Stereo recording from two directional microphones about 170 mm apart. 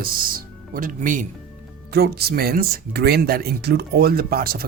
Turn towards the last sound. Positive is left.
turn(degrees=-60)  # may be behind; listen again after turning